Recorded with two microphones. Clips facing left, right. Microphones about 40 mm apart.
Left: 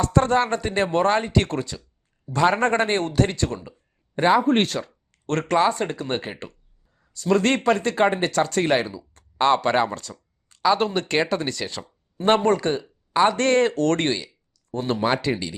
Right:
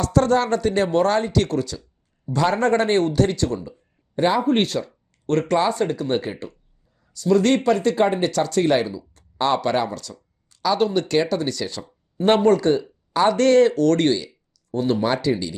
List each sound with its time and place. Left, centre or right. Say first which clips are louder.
0.0 s speech: right 1 dB; left
4.4 s speech: right 1 dB; left
12.5 s speech: right 5 dB; left
13.3 s speech: right 4 dB; left